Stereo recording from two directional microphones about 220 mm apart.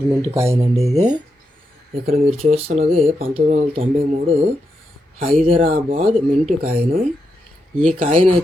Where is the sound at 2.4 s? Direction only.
25° right (ahead or behind).